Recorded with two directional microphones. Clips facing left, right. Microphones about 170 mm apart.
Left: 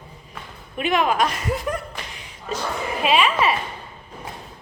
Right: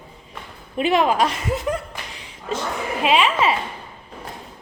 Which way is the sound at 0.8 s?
30° right (ahead or behind).